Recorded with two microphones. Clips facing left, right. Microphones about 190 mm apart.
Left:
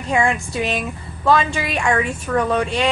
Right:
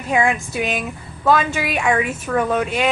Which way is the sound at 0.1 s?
5° right (ahead or behind).